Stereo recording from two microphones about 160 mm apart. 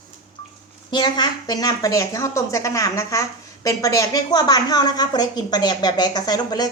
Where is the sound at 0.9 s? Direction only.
30° left (ahead or behind).